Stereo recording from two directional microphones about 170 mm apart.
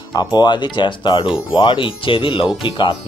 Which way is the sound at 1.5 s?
30° left (ahead or behind).